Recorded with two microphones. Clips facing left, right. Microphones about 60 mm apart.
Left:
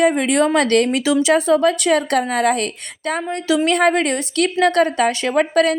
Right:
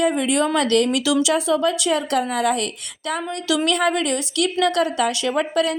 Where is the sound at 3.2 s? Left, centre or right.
Left.